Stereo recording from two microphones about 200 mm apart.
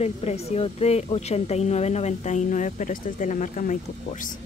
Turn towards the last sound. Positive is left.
turn(degrees=40)  # may be behind; listen again after turning